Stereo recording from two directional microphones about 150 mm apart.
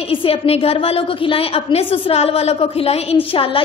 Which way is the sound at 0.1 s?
40° left (ahead or behind).